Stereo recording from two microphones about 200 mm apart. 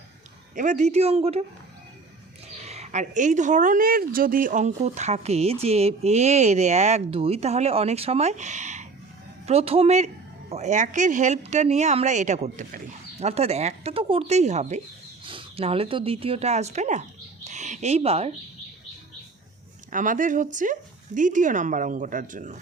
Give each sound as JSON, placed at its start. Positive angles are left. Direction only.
{"t": 0.5, "sound": "speech", "side_deg": -40}
{"t": 2.6, "sound": "speech", "side_deg": -35}
{"t": 19.9, "sound": "speech", "side_deg": -40}